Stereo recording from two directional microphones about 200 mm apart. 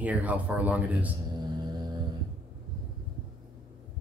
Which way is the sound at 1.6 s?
20° right (ahead or behind).